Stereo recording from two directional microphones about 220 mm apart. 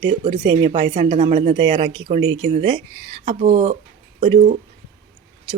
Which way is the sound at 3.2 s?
30° right (ahead or behind).